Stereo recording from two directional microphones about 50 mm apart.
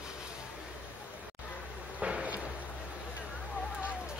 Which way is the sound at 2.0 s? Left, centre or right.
Right.